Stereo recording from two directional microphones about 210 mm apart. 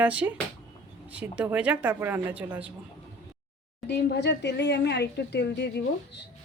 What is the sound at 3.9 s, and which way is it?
Speech, 55° left (ahead or behind).